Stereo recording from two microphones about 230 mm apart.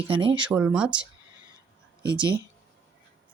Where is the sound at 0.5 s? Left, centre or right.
Centre.